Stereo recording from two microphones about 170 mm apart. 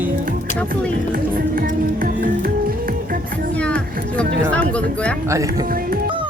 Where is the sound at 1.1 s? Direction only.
55° right (ahead or behind).